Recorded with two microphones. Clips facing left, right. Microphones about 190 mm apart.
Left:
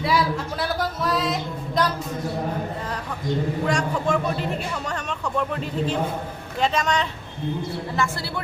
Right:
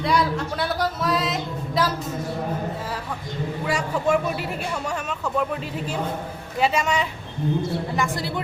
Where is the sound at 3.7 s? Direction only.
5° right (ahead or behind).